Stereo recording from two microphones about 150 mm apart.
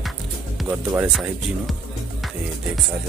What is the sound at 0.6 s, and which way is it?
Speech, 15° right (ahead or behind).